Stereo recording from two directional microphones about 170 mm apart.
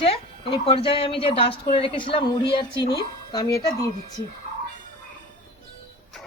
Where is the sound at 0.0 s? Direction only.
35° left (ahead or behind).